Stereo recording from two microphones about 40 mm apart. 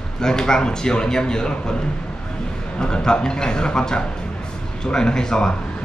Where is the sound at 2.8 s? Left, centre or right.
Centre.